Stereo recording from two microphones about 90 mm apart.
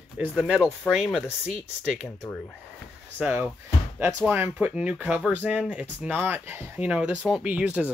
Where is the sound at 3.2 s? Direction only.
25° right (ahead or behind).